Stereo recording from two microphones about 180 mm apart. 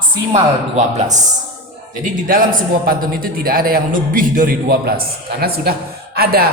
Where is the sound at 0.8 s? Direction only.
40° right (ahead or behind).